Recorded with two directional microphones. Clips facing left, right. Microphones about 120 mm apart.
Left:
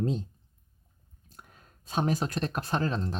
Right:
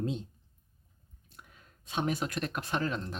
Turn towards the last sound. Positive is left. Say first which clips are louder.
# left 3 dB
turn(degrees=35)  # may be behind; listen again after turning